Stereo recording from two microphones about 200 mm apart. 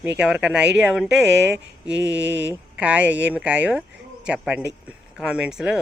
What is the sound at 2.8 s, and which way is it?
Speech, 5° right (ahead or behind).